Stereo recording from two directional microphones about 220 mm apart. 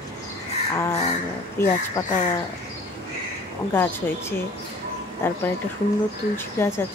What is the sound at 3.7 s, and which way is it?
Speech, 10° left (ahead or behind).